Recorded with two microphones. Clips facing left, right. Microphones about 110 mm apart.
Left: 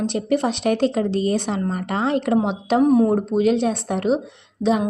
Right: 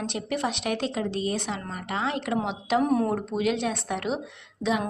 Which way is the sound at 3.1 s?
35° left (ahead or behind).